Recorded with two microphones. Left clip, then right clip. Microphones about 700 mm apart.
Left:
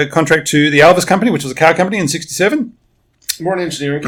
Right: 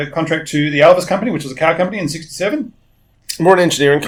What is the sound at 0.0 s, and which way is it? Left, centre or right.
Speech, left.